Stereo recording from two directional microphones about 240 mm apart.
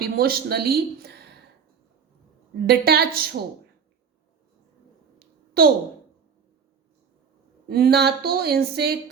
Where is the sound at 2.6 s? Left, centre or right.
Right.